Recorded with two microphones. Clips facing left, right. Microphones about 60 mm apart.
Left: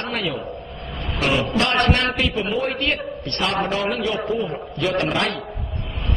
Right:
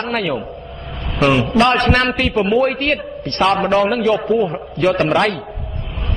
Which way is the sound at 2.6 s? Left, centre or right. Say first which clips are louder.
Right 5 dB; right.